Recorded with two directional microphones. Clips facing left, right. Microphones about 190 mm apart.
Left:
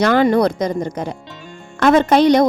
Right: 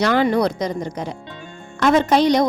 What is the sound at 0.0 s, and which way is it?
A woman's voice, 50° left (ahead or behind).